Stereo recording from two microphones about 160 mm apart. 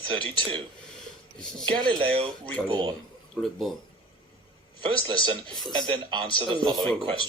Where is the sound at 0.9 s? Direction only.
5° left (ahead or behind).